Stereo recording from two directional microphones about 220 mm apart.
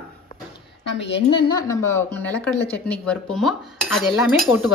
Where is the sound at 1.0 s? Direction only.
50° left (ahead or behind).